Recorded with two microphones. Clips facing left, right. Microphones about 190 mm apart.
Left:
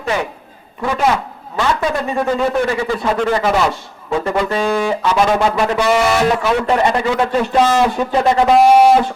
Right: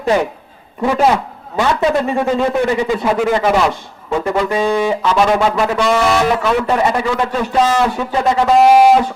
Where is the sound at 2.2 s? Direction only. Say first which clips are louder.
Right 1 dB; 15° right (ahead or behind).